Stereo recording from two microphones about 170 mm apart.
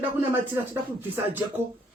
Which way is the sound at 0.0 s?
15° right (ahead or behind).